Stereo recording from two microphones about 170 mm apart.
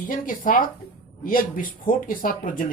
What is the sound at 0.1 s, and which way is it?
Speech, 50° left (ahead or behind).